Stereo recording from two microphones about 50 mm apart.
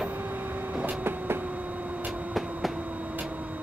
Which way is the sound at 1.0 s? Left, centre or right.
Right.